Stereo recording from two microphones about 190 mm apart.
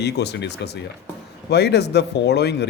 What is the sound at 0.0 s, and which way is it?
Speech, 60° left (ahead or behind).